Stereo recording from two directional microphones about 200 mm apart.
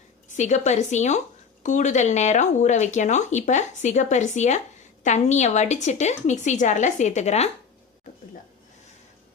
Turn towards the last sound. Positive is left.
turn(degrees=35)  # may be behind; listen again after turning